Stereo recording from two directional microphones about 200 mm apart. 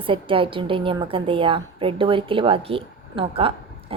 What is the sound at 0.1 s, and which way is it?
A woman's voice, 25° right (ahead or behind).